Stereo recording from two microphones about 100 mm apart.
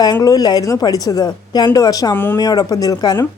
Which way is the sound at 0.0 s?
40° left (ahead or behind).